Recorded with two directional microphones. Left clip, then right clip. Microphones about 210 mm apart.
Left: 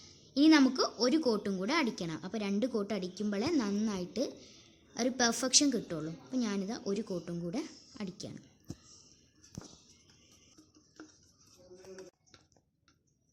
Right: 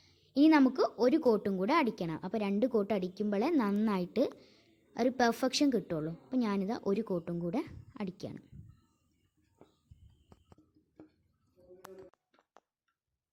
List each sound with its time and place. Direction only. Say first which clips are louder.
0.0 s a woman's voice: even; 25° right (ahead or behind)